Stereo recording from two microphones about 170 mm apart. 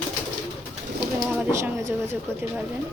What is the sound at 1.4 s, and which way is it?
Speech, 15° right (ahead or behind).